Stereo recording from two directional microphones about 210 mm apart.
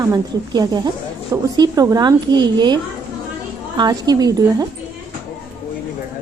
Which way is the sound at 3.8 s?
20° right (ahead or behind).